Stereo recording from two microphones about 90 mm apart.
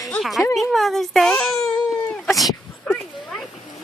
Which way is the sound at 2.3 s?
Centre (ahead or behind).